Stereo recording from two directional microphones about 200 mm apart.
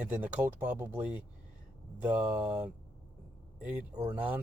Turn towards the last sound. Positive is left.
turn(degrees=-5)  # may be behind; listen again after turning